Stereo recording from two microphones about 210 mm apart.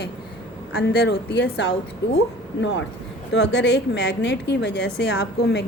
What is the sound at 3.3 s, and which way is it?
A woman's voice, 55° left (ahead or behind).